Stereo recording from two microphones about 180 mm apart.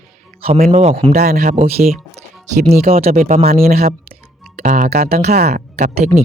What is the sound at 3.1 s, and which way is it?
Speech, 45° right (ahead or behind).